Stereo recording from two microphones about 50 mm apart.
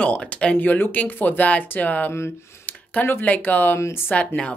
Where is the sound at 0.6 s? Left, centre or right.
Left.